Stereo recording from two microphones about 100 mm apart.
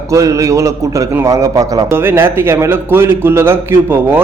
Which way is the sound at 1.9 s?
25° right (ahead or behind).